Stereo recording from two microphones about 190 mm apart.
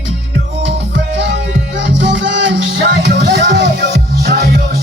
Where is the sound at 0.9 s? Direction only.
65° right (ahead or behind).